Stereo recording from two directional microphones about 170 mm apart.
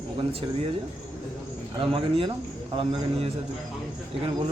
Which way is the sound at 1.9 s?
30° right (ahead or behind).